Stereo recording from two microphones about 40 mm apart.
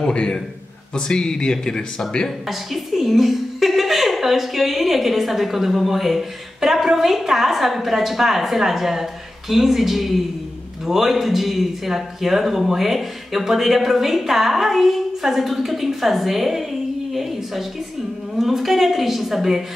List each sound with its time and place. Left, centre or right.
0.1 s a man's voice: left
2.4 s a woman's voice: centre
17.1 s a sound: centre
18.4 s a woman's voice: centre